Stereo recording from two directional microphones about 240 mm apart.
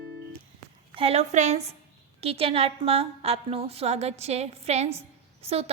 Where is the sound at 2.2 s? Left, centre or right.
Right.